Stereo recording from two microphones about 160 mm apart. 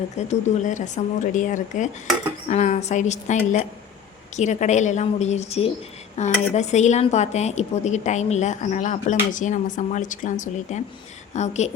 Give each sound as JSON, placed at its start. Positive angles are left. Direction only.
{"t": 0.2, "sound": "speech", "side_deg": 45}